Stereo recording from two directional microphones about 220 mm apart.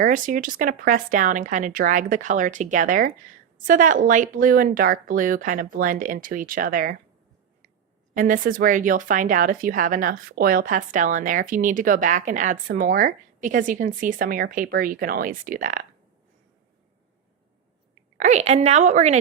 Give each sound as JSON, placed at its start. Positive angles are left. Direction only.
{"t": 0.0, "sound": "speech", "side_deg": -35}
{"t": 8.1, "sound": "speech", "side_deg": -35}
{"t": 18.2, "sound": "speech", "side_deg": -30}